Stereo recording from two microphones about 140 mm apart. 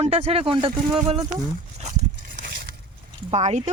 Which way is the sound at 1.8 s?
60° right (ahead or behind).